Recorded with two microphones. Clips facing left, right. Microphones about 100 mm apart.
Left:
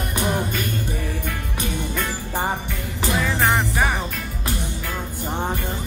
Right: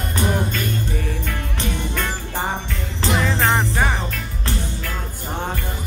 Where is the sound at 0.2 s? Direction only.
15° left (ahead or behind).